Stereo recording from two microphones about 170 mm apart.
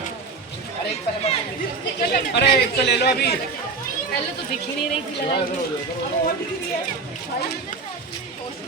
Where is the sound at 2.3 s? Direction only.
90° left.